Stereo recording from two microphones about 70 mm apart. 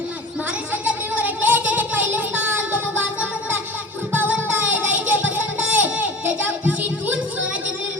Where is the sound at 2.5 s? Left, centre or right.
Right.